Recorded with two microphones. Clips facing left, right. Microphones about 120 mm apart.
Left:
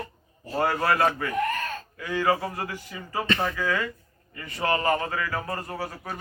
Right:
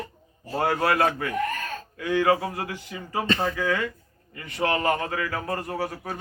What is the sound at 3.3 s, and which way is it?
Speech, 35° right (ahead or behind).